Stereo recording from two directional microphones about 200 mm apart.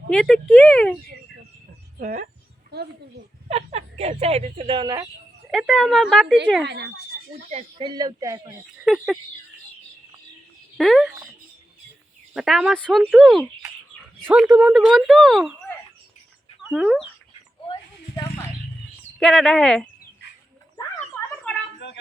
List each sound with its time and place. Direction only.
0.1 s speech: 5° left (ahead or behind)
2.0 s speech: 40° right (ahead or behind)
3.5 s speech: 30° right (ahead or behind)
5.5 s speech: centre (ahead or behind)
6.7 s speech: 55° right (ahead or behind)
7.5 s speech: 25° right (ahead or behind)
8.8 s speech: centre (ahead or behind)
10.8 s speech: centre (ahead or behind)
12.3 s speech: centre (ahead or behind)
19.2 s speech: 5° left (ahead or behind)
20.7 s a sound: 15° left (ahead or behind)